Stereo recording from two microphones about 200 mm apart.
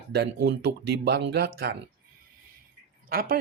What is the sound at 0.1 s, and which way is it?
Speech, 55° right (ahead or behind).